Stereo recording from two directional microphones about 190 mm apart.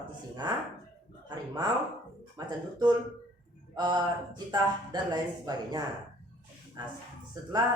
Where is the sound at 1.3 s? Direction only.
20° right (ahead or behind).